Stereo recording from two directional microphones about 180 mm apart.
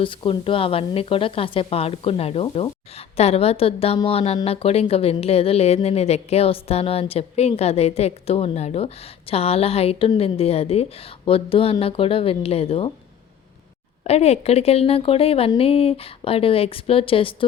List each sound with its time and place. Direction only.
0.0 s a woman's voice: 30° left (ahead or behind)
14.0 s a woman's voice: 35° left (ahead or behind)